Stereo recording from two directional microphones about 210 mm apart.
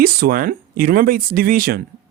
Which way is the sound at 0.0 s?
45° right (ahead or behind).